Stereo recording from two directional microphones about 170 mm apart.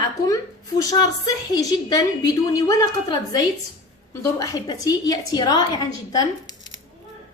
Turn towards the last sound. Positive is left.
turn(degrees=20)  # may be behind; listen again after turning